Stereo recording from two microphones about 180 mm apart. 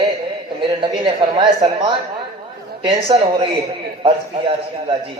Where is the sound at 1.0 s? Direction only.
25° right (ahead or behind).